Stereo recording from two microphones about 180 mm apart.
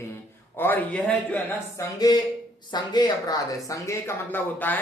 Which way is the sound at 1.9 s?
20° left (ahead or behind).